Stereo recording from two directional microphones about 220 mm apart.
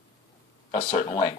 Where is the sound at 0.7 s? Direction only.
35° left (ahead or behind).